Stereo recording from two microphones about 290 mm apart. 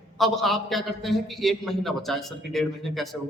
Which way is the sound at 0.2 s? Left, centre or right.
Centre.